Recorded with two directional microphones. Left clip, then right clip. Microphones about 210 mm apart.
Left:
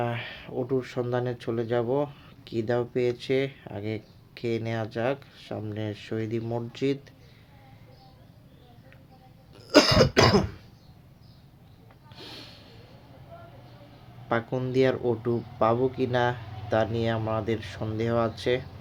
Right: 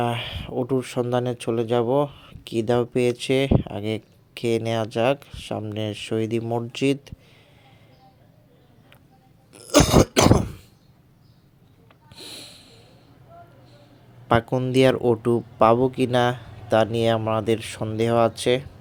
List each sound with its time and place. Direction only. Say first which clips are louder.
0.0 s speech: right 5 dB; 30° right (ahead or behind)
9.6 s throat clearing: right 2 dB; 45° right (ahead or behind)
12.1 s a sound: right 4 dB; 15° right (ahead or behind)
14.3 s speech: right 7 dB; 35° right (ahead or behind)